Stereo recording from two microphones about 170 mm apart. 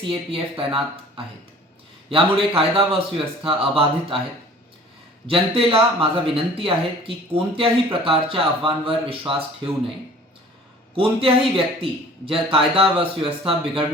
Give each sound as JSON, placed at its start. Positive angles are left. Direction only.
{"t": 0.0, "sound": "a man's voice", "side_deg": -30}
{"t": 5.3, "sound": "a man's voice", "side_deg": -35}
{"t": 10.9, "sound": "a man's voice", "side_deg": -30}